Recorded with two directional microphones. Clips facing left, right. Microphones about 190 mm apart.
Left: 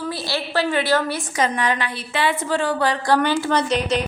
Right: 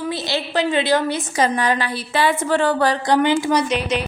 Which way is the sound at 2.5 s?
55° right (ahead or behind).